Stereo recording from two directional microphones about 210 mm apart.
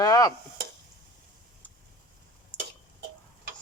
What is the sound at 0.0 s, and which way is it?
Chop, 20° left (ahead or behind).